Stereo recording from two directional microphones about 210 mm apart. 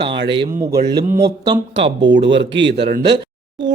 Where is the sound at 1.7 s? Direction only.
60° right (ahead or behind).